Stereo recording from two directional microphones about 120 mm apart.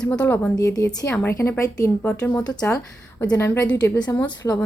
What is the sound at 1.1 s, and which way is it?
Speech, 20° left (ahead or behind).